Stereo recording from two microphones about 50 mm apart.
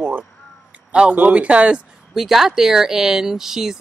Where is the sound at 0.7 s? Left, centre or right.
Right.